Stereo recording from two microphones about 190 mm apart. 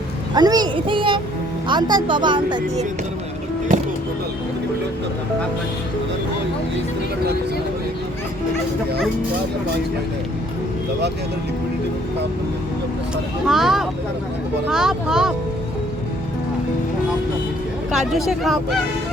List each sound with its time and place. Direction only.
0.3 s a child's voice: 20° right (ahead or behind)
13.4 s speech: centre (ahead or behind)
17.9 s speech: centre (ahead or behind)